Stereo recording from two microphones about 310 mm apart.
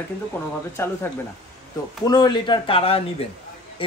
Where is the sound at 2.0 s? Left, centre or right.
Centre.